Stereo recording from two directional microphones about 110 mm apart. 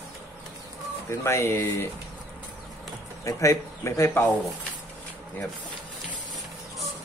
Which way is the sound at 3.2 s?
30° left (ahead or behind).